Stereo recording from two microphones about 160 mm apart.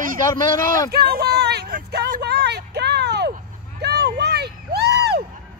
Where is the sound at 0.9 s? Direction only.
70° right (ahead or behind); by 5.2 s 90° right.